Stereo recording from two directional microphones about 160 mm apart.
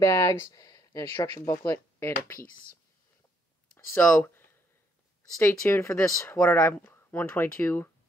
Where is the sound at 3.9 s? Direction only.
10° left (ahead or behind).